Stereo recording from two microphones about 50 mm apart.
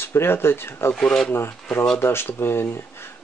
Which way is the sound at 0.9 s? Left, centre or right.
Centre.